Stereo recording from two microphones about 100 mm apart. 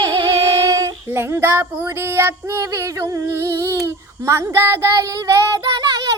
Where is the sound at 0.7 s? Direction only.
35° right (ahead or behind).